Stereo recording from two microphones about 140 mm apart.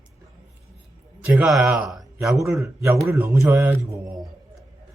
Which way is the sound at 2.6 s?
20° right (ahead or behind).